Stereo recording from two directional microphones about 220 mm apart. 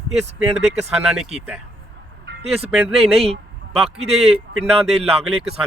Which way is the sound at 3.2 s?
25° right (ahead or behind).